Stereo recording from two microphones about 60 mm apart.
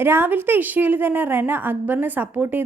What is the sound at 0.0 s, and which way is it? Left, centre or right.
A woman's voice, right.